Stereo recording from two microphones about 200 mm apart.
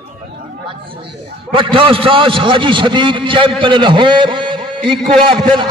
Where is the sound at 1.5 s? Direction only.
25° right (ahead or behind).